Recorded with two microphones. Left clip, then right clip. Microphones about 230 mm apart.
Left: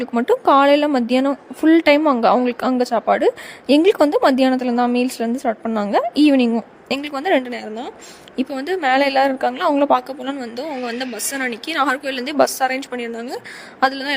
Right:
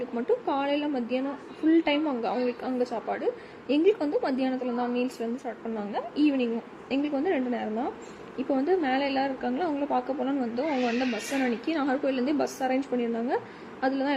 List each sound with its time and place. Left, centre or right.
0.0 s a woman's voice: left